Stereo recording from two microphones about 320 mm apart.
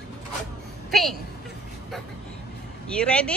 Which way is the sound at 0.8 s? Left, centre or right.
Centre.